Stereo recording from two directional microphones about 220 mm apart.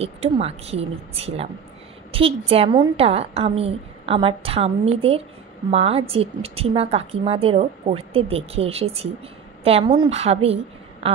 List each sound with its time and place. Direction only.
0.0 s a woman's voice: 25° right (ahead or behind)